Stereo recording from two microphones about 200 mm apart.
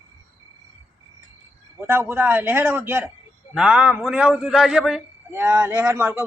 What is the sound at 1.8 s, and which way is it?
A man's voice, 10° right (ahead or behind).